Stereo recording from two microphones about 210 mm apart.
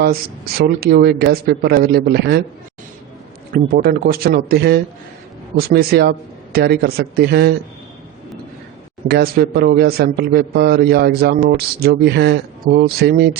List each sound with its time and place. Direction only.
0.6 s speech: 50° right (ahead or behind)
3.5 s speech: 45° right (ahead or behind)
9.0 s speech: 50° right (ahead or behind)